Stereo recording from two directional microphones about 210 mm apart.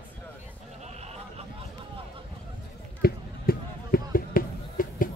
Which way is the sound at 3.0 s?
45° left (ahead or behind).